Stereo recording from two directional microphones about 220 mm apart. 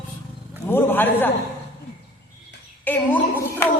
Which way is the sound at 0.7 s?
10° left (ahead or behind).